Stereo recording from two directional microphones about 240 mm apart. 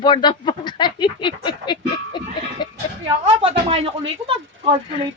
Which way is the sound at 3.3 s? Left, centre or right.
Right.